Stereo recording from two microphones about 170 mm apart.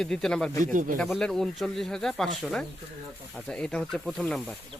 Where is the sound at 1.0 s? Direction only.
5° left (ahead or behind).